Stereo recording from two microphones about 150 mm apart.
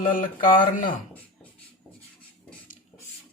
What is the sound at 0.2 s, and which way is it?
Speech, 65° left (ahead or behind).